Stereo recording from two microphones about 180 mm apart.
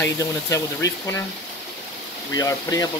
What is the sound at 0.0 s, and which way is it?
Speech, 15° left (ahead or behind).